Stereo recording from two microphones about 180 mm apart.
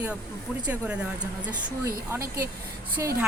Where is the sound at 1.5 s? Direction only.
15° right (ahead or behind).